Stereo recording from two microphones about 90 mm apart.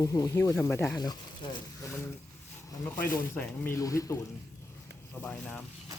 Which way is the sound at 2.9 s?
20° left (ahead or behind).